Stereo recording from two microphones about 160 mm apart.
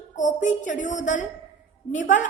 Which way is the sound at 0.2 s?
50° left (ahead or behind).